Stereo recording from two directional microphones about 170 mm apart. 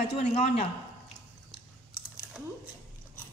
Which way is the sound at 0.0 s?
40° left (ahead or behind).